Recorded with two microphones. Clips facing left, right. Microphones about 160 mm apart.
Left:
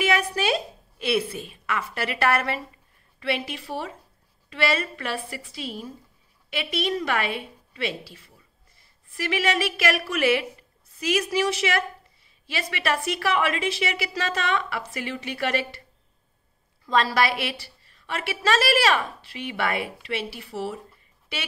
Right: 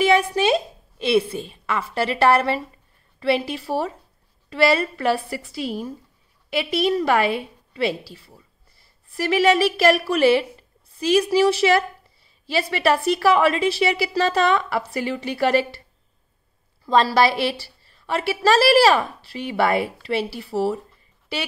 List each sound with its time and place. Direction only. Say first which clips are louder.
0.0 s a woman's voice: right 6 dB; 25° right (ahead or behind)
16.8 s a woman's voice: right 5 dB; 30° right (ahead or behind)